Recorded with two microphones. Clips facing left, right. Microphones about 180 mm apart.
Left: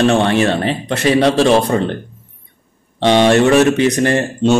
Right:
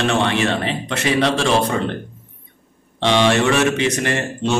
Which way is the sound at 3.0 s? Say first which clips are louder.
Left 5 dB; 40° left (ahead or behind).